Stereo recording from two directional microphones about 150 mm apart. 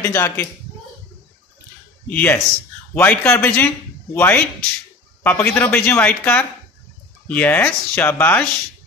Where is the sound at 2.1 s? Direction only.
10° left (ahead or behind).